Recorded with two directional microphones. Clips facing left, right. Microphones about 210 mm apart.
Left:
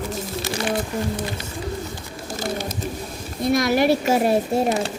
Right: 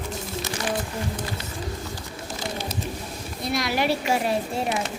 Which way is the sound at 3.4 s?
45° left (ahead or behind).